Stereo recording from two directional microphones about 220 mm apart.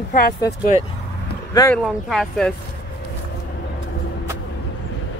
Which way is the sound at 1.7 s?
Centre (ahead or behind).